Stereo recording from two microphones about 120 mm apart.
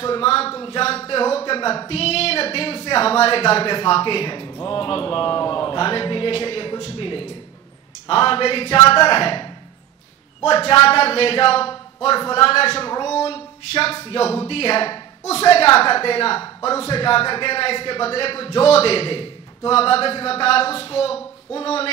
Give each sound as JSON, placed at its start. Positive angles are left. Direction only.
{"t": 0.0, "sound": "a sound", "side_deg": 50}
{"t": 1.9, "sound": "a woman's voice", "side_deg": 60}
{"t": 10.9, "sound": "a woman's voice", "side_deg": 55}